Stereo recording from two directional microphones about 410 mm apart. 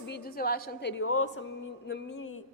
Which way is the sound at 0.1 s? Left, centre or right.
Left.